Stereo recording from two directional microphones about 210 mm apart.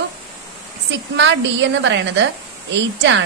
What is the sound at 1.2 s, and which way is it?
A woman's voice, 55° right (ahead or behind).